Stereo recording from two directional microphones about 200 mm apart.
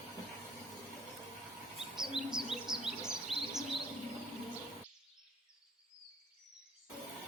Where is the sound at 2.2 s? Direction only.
Centre (ahead or behind).